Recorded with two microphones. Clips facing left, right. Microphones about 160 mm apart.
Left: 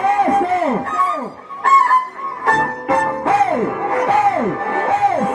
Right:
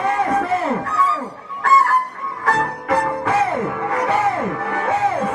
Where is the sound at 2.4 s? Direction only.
25° left (ahead or behind).